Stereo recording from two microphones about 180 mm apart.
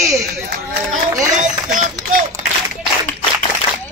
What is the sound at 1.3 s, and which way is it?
Speech, 45° right (ahead or behind).